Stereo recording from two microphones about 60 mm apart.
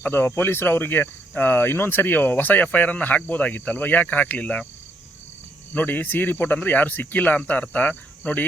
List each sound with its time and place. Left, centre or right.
0.0 s speech: left
5.7 s speech: left